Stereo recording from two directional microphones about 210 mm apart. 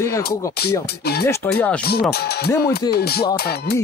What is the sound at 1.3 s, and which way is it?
Speech, 5° left (ahead or behind).